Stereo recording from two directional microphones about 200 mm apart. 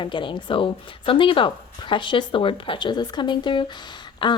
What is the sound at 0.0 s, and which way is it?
A woman's voice, 25° left (ahead or behind).